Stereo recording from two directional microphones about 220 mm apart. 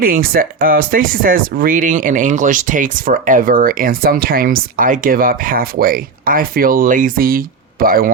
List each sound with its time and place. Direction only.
0.0 s speech: 40° right (ahead or behind)